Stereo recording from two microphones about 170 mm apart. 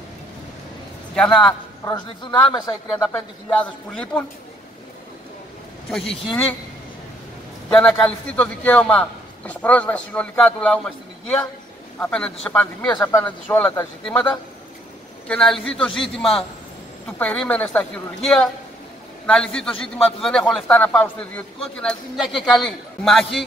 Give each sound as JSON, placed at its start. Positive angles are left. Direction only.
{"t": 1.1, "sound": "a man's voice", "side_deg": 5}
{"t": 1.9, "sound": "a man's voice", "side_deg": 25}
{"t": 5.9, "sound": "a man's voice", "side_deg": 0}
{"t": 7.7, "sound": "a man's voice", "side_deg": 5}
{"t": 12.0, "sound": "a man's voice", "side_deg": 5}